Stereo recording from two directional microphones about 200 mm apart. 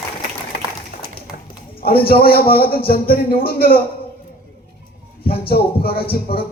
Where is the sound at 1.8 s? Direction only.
50° left (ahead or behind).